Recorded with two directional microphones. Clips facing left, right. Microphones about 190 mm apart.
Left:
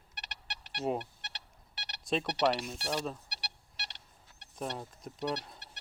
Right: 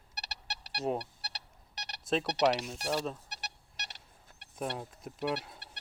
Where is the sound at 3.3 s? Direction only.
45° right (ahead or behind).